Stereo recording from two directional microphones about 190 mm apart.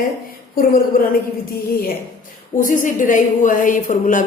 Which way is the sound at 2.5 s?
45° left (ahead or behind).